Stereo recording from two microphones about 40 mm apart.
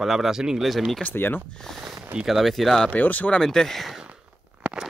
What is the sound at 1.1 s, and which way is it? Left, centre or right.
Speech, left.